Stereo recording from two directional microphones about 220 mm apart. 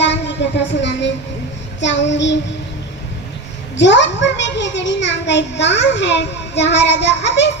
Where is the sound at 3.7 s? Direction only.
55° left (ahead or behind).